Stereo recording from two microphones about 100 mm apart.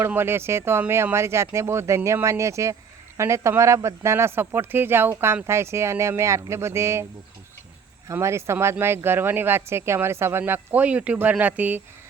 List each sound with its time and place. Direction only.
0.0 s speech: 25° right (ahead or behind)